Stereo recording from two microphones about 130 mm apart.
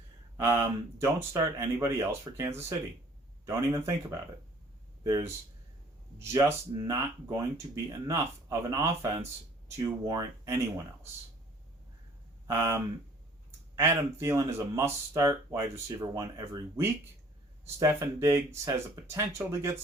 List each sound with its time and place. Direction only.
0.3 s speech: 15° right (ahead or behind)
12.5 s speech: 20° right (ahead or behind)